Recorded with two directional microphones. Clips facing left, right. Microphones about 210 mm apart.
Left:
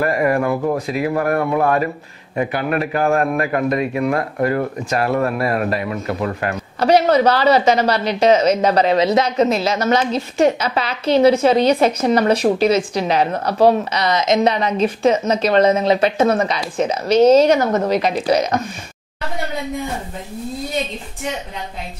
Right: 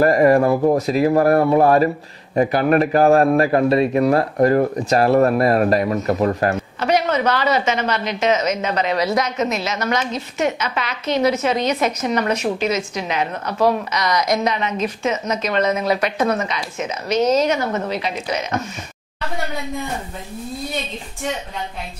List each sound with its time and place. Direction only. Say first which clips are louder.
0.0 s a man's voice: right 4 dB; 35° right (ahead or behind)
6.8 s a woman's voice: left 6 dB; 35° left (ahead or behind)
8.9 s a woman's voice: left 5 dB; 25° left (ahead or behind)